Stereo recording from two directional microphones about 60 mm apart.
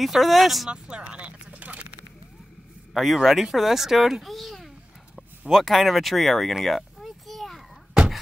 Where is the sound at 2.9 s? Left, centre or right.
Centre.